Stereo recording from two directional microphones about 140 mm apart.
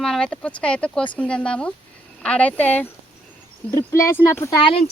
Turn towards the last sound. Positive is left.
turn(degrees=35)  # may be behind; listen again after turning